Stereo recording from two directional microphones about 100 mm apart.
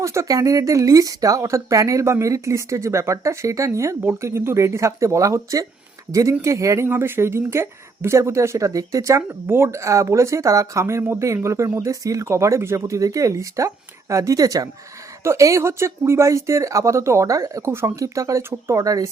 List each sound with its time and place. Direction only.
0.0 s speech: 30° right (ahead or behind)